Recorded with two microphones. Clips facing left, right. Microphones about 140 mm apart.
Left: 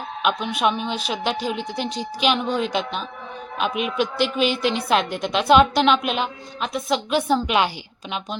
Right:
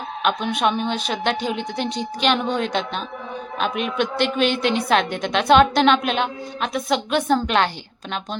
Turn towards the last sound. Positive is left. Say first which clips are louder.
# right 1 dB
turn(degrees=5)  # may be behind; listen again after turning